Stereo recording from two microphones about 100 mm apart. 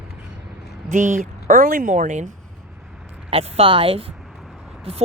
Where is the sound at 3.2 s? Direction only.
85° right.